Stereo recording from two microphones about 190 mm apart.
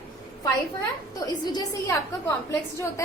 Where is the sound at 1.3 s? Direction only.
20° left (ahead or behind).